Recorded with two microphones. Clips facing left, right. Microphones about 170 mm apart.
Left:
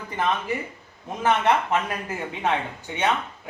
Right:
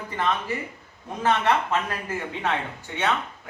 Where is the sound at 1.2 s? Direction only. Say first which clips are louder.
Left 1 dB; 20° left (ahead or behind).